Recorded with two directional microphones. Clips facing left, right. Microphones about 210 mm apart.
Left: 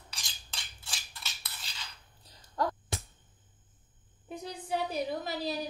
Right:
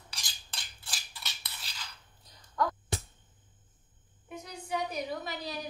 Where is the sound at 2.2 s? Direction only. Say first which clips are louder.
Even; 30° left (ahead or behind).